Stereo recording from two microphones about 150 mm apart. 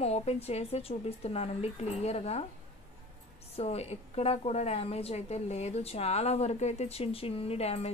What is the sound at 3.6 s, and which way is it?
A woman's voice, 45° left (ahead or behind).